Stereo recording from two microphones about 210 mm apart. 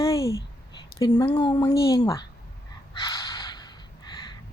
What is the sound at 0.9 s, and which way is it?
A woman's voice, 20° left (ahead or behind).